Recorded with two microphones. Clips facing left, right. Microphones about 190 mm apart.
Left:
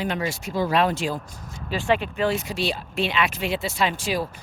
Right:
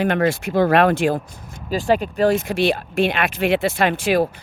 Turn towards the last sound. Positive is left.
turn(degrees=-60)  # may be behind; listen again after turning